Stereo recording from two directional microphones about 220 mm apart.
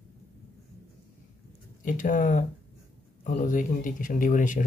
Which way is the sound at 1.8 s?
35° left (ahead or behind).